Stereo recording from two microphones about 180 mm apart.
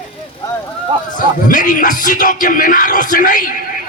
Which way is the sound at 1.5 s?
45° left (ahead or behind).